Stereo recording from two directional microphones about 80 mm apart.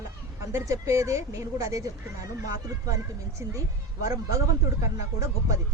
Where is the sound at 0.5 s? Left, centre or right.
Right.